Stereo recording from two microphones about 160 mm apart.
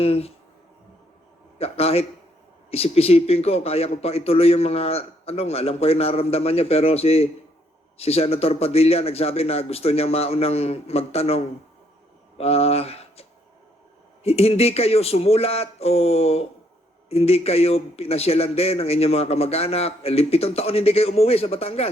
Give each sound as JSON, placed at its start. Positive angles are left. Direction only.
{"t": 0.0, "sound": "speech", "side_deg": 40}
{"t": 1.5, "sound": "speech", "side_deg": 40}
{"t": 14.3, "sound": "speech", "side_deg": 40}